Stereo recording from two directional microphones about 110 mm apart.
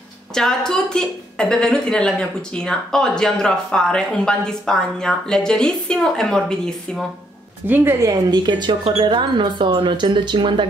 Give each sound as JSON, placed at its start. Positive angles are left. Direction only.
{"t": 0.3, "sound": "a woman's voice", "side_deg": 5}
{"t": 7.6, "sound": "speech", "side_deg": -15}
{"t": 8.0, "sound": "speech", "side_deg": -40}